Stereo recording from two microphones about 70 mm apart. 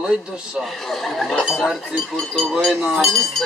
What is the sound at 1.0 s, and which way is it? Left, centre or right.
Speech, centre.